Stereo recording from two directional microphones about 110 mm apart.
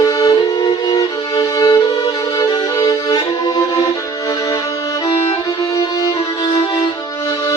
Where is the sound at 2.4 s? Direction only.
35° left (ahead or behind).